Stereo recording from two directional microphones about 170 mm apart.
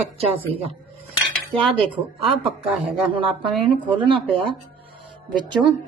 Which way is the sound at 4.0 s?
30° right (ahead or behind).